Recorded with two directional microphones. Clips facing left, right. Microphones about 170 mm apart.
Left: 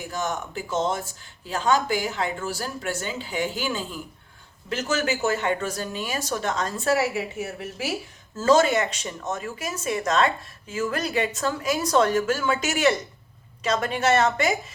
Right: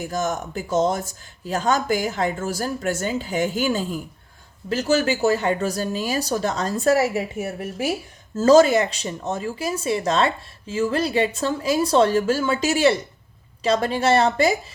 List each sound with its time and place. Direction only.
0.1 s a woman's voice: 45° right (ahead or behind)
4.7 s speech: 35° right (ahead or behind)
8.4 s speech: 35° right (ahead or behind)